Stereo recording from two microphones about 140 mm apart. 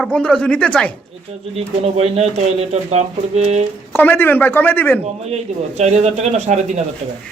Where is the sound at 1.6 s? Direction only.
45° right (ahead or behind).